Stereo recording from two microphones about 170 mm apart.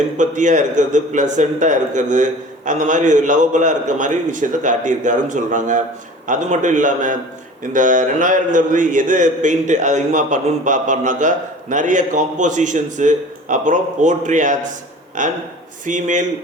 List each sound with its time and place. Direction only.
0.2 s a man's voice: 45° right (ahead or behind)